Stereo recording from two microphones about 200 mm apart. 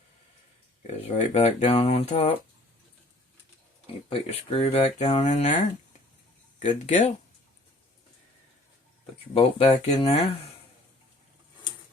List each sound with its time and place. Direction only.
0.9 s speech: 35° left (ahead or behind)
4.1 s speech: 30° left (ahead or behind)
6.6 s speech: 35° left (ahead or behind)
9.3 s speech: 30° left (ahead or behind)